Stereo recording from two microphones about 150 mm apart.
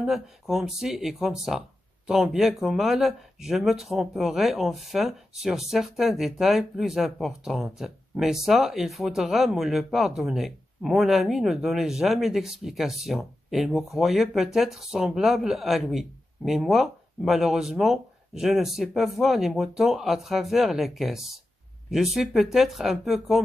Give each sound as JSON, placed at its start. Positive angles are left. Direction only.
{"t": 0.0, "sound": "speech", "side_deg": 0}